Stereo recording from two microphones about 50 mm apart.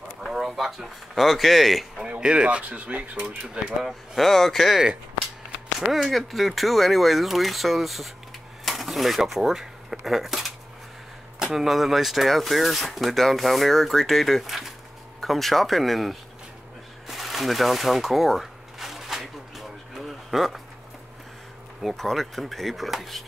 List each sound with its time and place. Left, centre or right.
0.2 s speech: centre
2.0 s speech: right
4.1 s speech: centre
5.8 s speech: centre
17.1 s a sound: centre
21.8 s speech: centre